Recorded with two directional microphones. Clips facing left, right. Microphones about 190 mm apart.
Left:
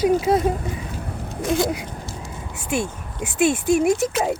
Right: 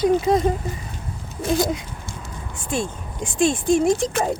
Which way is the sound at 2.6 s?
10° left (ahead or behind).